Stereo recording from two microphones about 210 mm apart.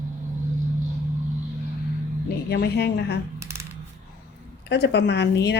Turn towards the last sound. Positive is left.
turn(degrees=55)  # may be behind; listen again after turning